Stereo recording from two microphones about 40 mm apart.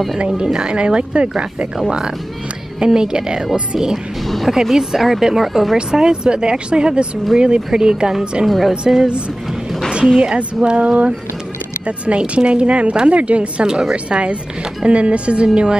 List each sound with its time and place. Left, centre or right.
0.4 s speech: centre
4.3 s speech: centre
5.9 s speech: centre
8.5 s speech: centre
8.8 s speech: right
10.3 s speech: right
12.2 s speech: right